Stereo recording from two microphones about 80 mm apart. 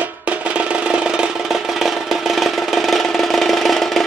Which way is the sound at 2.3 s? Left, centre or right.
Centre.